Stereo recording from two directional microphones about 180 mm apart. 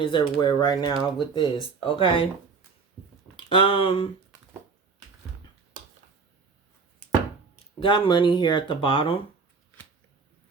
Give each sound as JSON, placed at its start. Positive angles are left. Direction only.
{"t": 0.0, "sound": "speech", "side_deg": 25}
{"t": 3.3, "sound": "speech", "side_deg": 30}
{"t": 7.8, "sound": "speech", "side_deg": 25}